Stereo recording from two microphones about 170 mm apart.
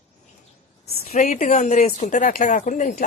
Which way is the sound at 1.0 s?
45° left (ahead or behind).